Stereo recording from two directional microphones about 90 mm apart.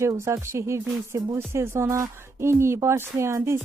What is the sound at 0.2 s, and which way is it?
A woman's voice, 30° right (ahead or behind).